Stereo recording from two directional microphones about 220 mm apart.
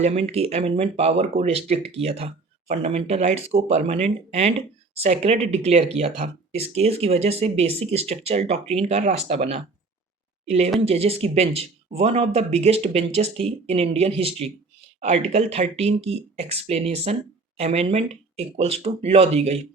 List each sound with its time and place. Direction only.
0.0 s speech: 30° right (ahead or behind)
10.8 s speech: 25° right (ahead or behind)